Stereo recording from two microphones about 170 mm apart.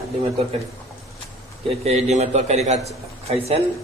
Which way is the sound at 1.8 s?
40° right (ahead or behind).